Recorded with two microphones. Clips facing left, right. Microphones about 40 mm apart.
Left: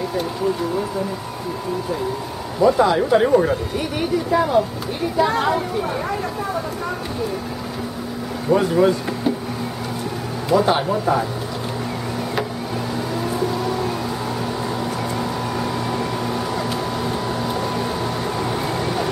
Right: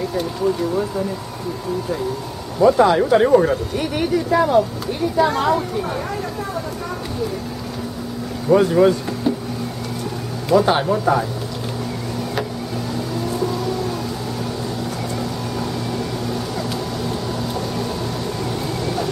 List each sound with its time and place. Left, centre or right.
2.6 s speech: centre
5.1 s speech: centre
8.5 s speech: centre
10.5 s speech: centre
13.3 s music: centre
15.6 s a sound: centre
18.4 s vehicle: centre